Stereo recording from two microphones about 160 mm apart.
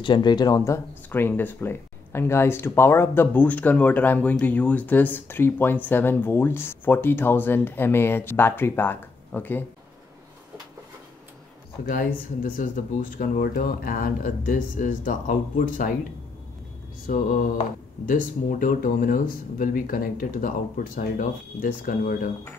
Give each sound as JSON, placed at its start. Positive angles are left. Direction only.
{"t": 0.0, "sound": "speech", "side_deg": 30}
{"t": 1.1, "sound": "speech", "side_deg": 10}
{"t": 11.8, "sound": "speech", "side_deg": 60}
{"t": 17.0, "sound": "speech", "side_deg": 60}